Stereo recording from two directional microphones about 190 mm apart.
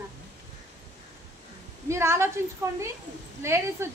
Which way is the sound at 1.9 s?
15° right (ahead or behind).